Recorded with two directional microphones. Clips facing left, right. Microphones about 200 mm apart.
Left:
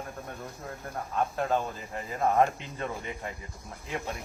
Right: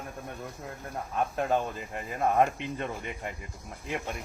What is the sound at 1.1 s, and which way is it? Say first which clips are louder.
Speech: even; 15° right (ahead or behind).